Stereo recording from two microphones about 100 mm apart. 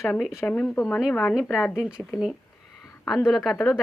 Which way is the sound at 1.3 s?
5° right (ahead or behind).